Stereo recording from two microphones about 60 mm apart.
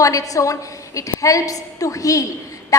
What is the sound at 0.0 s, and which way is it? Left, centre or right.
A woman's voice, left.